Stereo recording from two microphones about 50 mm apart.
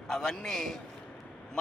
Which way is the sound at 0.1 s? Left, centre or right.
Centre.